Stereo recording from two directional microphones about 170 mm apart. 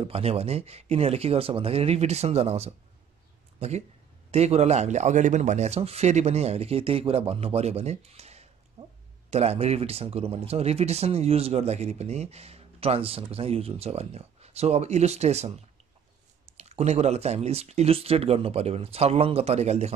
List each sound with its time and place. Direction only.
0.0 s speech: 35° right (ahead or behind)